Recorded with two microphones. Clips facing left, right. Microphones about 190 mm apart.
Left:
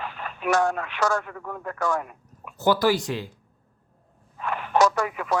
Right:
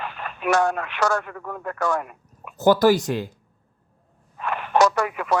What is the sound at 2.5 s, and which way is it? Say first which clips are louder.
Speech: right 5 dB; 45° right (ahead or behind).